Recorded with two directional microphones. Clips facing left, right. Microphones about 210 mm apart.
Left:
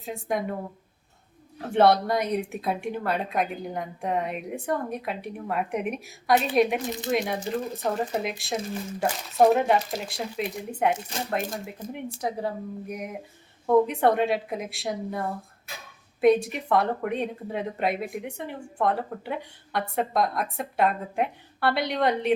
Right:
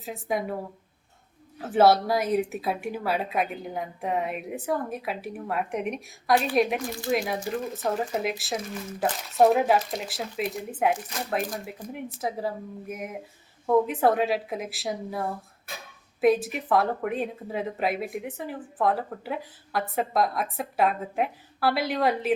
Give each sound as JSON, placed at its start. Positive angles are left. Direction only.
{"t": 0.0, "sound": "speech", "side_deg": -5}
{"t": 1.5, "sound": "speech", "side_deg": -5}
{"t": 6.8, "sound": "speech", "side_deg": 20}
{"t": 7.1, "sound": "speech", "side_deg": 0}
{"t": 12.2, "sound": "speech", "side_deg": 0}